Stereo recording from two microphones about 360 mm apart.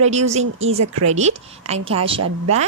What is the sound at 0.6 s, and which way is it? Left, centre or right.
Speech, right.